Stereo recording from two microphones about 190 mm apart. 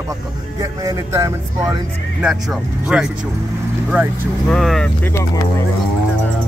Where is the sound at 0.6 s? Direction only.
20° right (ahead or behind).